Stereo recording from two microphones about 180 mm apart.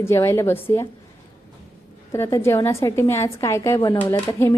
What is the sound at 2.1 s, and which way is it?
A woman's voice, 15° left (ahead or behind).